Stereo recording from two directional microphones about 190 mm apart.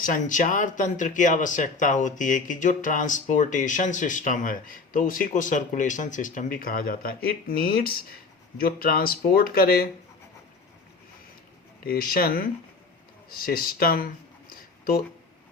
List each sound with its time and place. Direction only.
0.0 s speech: 45° left (ahead or behind)
11.8 s speech: 50° left (ahead or behind)
14.5 s a sound: 50° left (ahead or behind)